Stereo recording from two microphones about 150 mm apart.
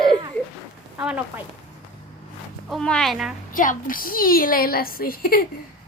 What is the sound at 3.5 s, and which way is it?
A woman's voice, 65° left (ahead or behind).